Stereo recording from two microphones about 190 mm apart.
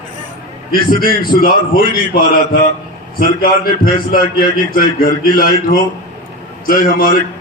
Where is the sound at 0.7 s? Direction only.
50° left (ahead or behind).